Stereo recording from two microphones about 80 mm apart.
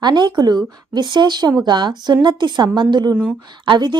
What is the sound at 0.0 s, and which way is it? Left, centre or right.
A woman's voice, right.